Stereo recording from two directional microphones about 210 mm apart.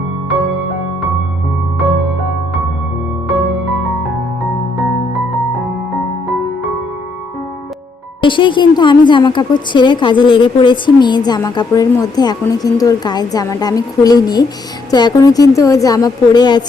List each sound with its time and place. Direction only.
8.2 s a woman's voice: 25° left (ahead or behind)